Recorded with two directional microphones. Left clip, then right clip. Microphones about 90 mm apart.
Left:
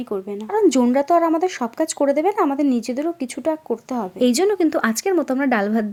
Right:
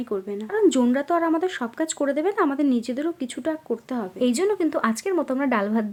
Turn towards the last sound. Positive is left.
turn(degrees=45)  # may be behind; listen again after turning